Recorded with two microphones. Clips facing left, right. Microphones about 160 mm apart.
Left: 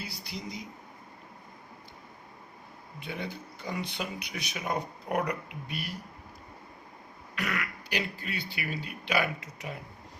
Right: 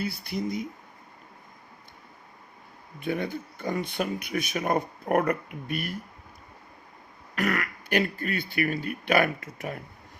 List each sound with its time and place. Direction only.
0.0 s speech: 55° right (ahead or behind)
3.0 s speech: 50° right (ahead or behind)
7.3 s speech: 50° right (ahead or behind)